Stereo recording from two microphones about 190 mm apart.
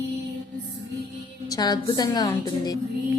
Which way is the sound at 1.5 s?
20° left (ahead or behind).